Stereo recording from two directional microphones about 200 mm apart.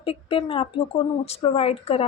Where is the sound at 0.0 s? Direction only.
25° left (ahead or behind).